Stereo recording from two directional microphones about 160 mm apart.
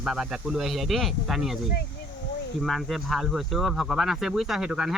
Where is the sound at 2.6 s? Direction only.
Centre (ahead or behind).